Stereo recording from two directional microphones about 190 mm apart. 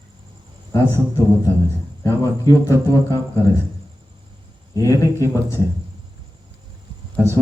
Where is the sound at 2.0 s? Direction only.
15° left (ahead or behind).